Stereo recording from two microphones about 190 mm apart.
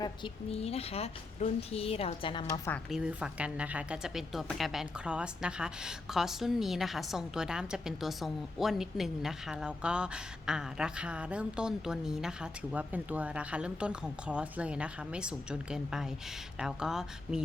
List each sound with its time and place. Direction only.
0.0 s a woman's voice: 30° left (ahead or behind)
2.9 s speech: 5° right (ahead or behind)